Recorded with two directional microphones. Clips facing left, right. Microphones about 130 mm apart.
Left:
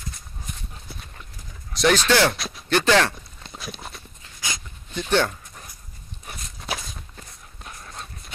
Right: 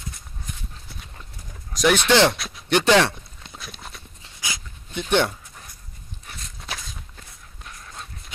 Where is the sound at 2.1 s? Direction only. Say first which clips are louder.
Right 2 dB; 20° right (ahead or behind).